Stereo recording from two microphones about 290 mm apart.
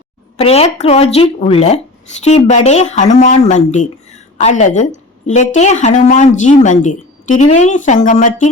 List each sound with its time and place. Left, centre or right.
0.3 s speech: left